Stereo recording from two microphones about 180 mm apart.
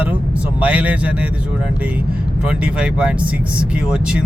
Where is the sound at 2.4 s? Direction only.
5° right (ahead or behind).